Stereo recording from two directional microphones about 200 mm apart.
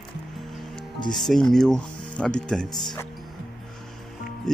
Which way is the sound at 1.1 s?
Centre (ahead or behind).